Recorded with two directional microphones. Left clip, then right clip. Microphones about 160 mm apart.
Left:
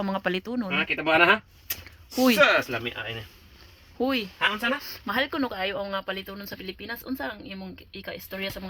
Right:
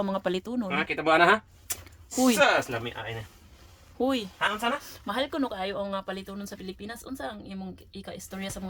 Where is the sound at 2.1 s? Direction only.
Centre (ahead or behind).